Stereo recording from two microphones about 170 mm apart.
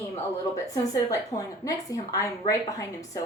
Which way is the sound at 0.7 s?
20° left (ahead or behind).